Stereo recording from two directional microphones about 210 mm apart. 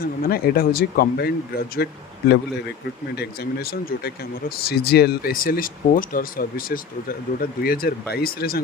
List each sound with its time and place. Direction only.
0.0 s speech: 45° left (ahead or behind)
3.2 s speech: 45° left (ahead or behind)